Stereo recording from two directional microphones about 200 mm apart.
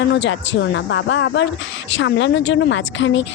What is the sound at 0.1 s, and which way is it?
Speech, 60° left (ahead or behind).